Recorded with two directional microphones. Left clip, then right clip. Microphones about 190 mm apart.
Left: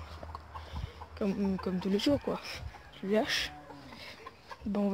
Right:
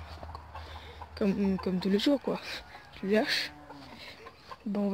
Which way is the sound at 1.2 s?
20° right (ahead or behind).